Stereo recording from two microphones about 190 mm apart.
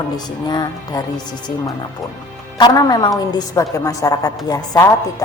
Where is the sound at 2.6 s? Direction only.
20° left (ahead or behind).